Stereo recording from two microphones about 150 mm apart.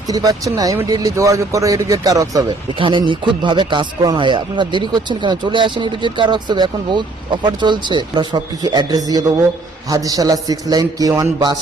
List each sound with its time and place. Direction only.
0.1 s speech: 25° right (ahead or behind)
2.7 s speech: 35° right (ahead or behind)